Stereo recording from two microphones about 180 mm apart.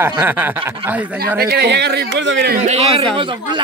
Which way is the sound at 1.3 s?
60° right (ahead or behind).